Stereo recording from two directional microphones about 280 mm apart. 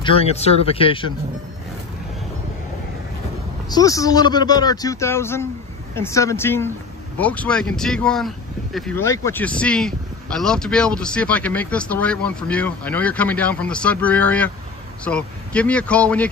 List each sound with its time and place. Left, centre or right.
0.0 s a man's voice: left
3.6 s speech: centre